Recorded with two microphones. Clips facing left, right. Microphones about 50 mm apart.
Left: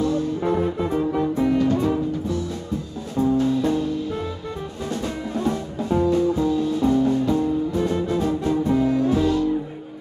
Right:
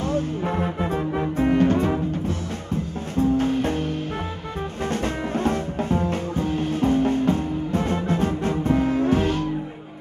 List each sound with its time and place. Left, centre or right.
0.0 s music: right
0.4 s music: right
3.3 s music: right